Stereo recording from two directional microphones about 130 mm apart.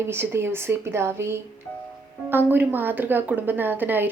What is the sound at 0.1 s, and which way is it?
Speech, 20° right (ahead or behind).